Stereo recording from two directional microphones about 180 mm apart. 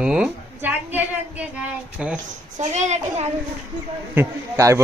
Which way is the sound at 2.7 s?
40° right (ahead or behind).